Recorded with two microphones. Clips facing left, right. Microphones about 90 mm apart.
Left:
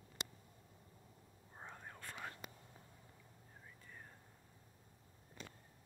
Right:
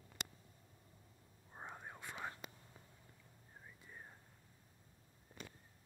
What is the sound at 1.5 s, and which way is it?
Whispering, 15° right (ahead or behind).